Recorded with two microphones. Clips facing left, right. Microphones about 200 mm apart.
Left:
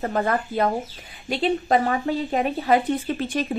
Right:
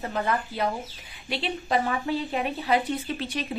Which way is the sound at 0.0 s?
50° left (ahead or behind).